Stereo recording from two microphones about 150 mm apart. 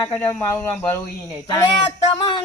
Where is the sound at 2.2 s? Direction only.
30° left (ahead or behind).